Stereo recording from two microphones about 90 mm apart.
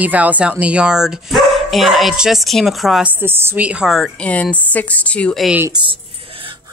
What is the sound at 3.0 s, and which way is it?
Speech, 25° right (ahead or behind).